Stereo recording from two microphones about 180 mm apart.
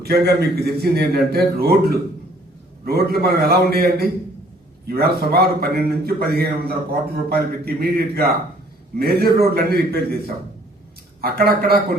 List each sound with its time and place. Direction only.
0.0 s a man's voice: 60° right (ahead or behind)
11.2 s a man's voice: 60° right (ahead or behind)